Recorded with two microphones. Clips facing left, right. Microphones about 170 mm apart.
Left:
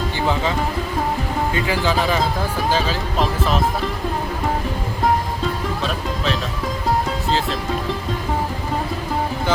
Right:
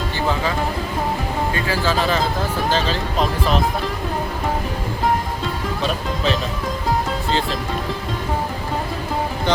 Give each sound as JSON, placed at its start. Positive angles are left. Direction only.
{"t": 1.5, "sound": "speech", "side_deg": 20}
{"t": 5.8, "sound": "speech", "side_deg": 0}